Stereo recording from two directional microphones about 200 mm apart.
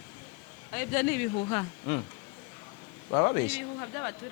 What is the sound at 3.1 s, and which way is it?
Speech, 20° left (ahead or behind).